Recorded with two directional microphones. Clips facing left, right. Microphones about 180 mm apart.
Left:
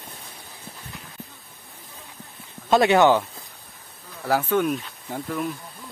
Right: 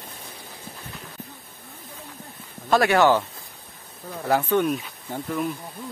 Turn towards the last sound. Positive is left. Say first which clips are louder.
# right 1 dB
turn(degrees=0)  # may be behind; listen again after turning